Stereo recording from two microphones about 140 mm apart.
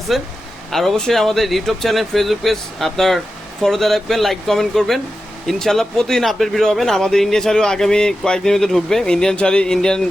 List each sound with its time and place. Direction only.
0.1 s speech: centre (ahead or behind)